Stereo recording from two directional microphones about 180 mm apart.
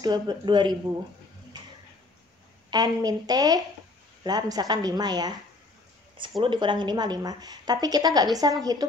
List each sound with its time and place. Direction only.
0.0 s a woman's voice: 25° right (ahead or behind)
2.7 s a woman's voice: 20° right (ahead or behind)
6.4 s a woman's voice: 25° right (ahead or behind)